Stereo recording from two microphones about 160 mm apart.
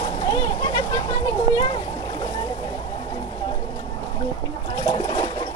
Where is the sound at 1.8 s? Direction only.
20° left (ahead or behind).